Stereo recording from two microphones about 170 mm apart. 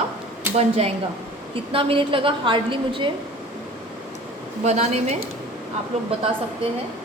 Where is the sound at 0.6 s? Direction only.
35° right (ahead or behind).